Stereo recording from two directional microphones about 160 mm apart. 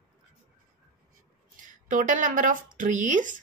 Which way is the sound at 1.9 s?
55° right (ahead or behind).